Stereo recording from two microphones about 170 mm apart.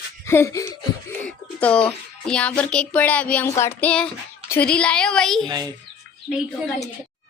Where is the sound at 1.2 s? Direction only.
5° left (ahead or behind).